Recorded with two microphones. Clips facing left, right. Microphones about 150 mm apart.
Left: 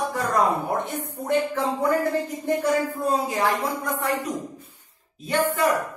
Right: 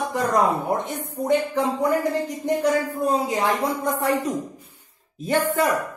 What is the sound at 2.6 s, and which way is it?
Speech, 20° right (ahead or behind).